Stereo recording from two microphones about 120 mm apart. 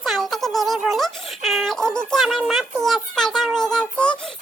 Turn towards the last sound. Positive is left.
turn(degrees=10)  # may be behind; listen again after turning